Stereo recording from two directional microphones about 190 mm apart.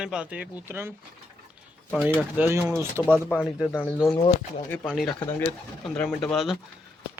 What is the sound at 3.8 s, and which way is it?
Speech, 10° left (ahead or behind).